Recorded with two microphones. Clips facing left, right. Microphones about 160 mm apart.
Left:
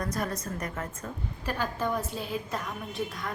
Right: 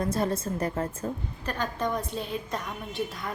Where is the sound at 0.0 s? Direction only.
25° right (ahead or behind).